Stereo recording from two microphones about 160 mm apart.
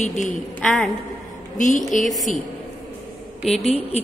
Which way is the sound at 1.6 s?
50° left (ahead or behind).